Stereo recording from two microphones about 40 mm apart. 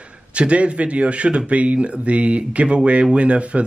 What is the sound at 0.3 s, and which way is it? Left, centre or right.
Speech, right.